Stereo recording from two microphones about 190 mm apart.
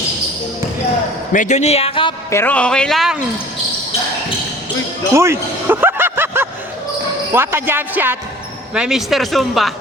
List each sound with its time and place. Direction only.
1.3 s speech: 40° left (ahead or behind)
2.3 s speech: 10° left (ahead or behind)
5.1 s a sound: 15° right (ahead or behind)
7.3 s speech: 10° right (ahead or behind)